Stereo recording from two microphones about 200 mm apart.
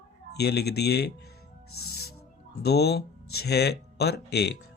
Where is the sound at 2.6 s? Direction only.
55° left (ahead or behind).